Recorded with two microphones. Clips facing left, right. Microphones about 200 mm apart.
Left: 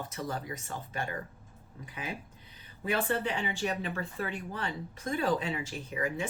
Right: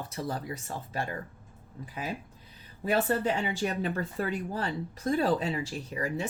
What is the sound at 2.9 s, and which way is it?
Speech, 40° right (ahead or behind).